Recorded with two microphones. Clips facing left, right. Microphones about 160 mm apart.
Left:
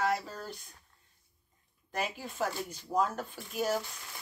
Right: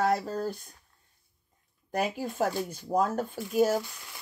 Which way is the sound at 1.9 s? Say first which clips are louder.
Right 6 dB; 45° right (ahead or behind).